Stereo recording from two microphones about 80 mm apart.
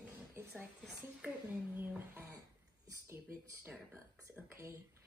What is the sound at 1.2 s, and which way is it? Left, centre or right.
Speech, centre.